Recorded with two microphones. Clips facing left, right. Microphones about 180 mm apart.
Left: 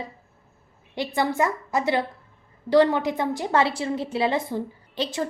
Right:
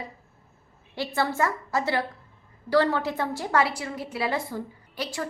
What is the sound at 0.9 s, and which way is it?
A woman's voice, 15° left (ahead or behind).